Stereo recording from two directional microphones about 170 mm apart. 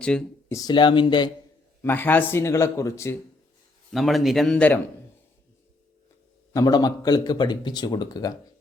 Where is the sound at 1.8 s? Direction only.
10° left (ahead or behind).